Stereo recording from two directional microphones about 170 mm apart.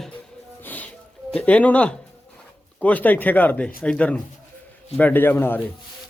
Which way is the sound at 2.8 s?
10° left (ahead or behind).